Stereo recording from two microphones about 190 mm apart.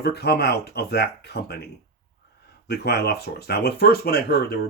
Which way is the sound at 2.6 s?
60° left (ahead or behind).